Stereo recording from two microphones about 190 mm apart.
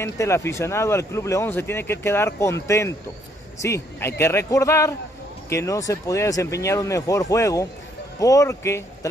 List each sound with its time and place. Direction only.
0.0 s speech: 15° left (ahead or behind)